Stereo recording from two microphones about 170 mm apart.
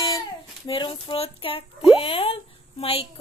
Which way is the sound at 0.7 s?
30° left (ahead or behind).